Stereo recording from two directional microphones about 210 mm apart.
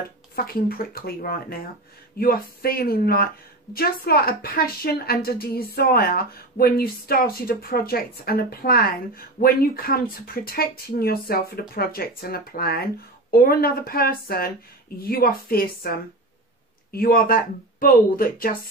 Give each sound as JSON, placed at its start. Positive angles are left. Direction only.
{"t": 0.4, "sound": "a woman's voice", "side_deg": 45}
{"t": 16.9, "sound": "a woman's voice", "side_deg": 45}